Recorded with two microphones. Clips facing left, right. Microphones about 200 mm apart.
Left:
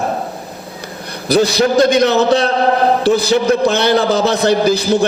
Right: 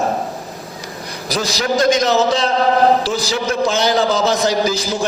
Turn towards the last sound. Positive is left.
turn(degrees=60)  # may be behind; listen again after turning